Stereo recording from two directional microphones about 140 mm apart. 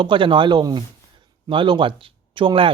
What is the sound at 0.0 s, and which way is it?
Speech, 35° right (ahead or behind).